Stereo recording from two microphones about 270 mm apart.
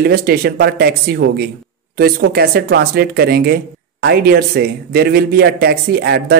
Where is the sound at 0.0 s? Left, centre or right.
Right.